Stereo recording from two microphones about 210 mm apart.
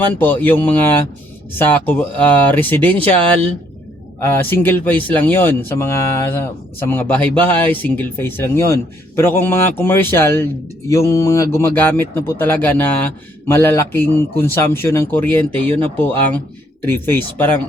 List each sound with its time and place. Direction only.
0.1 s speech: 10° left (ahead or behind)
3.0 s speech: 25° right (ahead or behind)
4.2 s speech: 10° left (ahead or behind)